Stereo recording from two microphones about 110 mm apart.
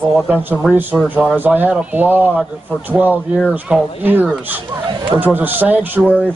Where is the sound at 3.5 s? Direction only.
10° right (ahead or behind).